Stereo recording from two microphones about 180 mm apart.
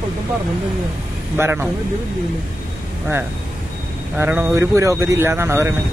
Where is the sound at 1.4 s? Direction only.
15° right (ahead or behind).